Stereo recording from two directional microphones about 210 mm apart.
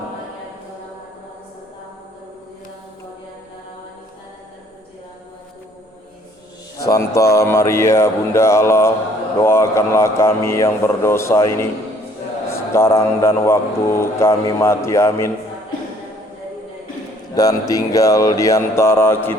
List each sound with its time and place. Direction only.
6.8 s a man's voice: 15° left (ahead or behind)
17.3 s a man's voice: 15° left (ahead or behind)